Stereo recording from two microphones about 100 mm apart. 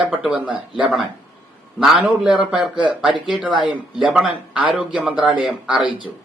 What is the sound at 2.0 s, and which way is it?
Speech, 10° right (ahead or behind).